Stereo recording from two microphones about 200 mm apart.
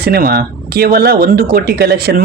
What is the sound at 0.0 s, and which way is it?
A man's voice, 50° right (ahead or behind).